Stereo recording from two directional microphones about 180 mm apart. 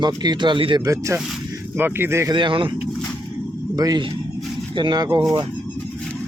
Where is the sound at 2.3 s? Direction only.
25° right (ahead or behind).